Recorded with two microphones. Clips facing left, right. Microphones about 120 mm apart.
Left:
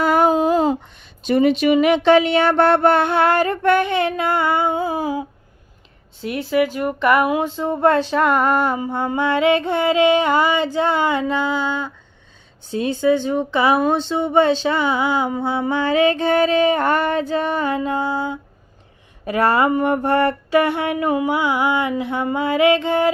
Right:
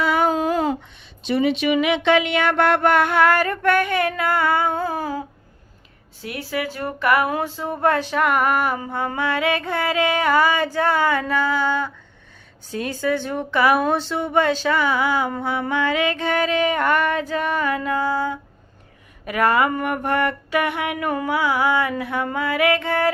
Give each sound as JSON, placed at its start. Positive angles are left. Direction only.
{"t": 0.0, "sound": "a sound", "side_deg": 45}
{"t": 0.3, "sound": "a sound", "side_deg": 20}
{"t": 1.2, "sound": "speech", "side_deg": 45}
{"t": 4.7, "sound": "a sound", "side_deg": 15}
{"t": 6.2, "sound": "speech", "side_deg": 20}
{"t": 15.7, "sound": "female singing", "side_deg": 30}
{"t": 19.2, "sound": "speech", "side_deg": 30}
{"t": 19.8, "sound": "female singing", "side_deg": 30}
{"t": 21.1, "sound": "speech", "side_deg": 20}